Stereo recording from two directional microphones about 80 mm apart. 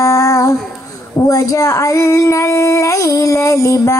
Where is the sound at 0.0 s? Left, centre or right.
Left.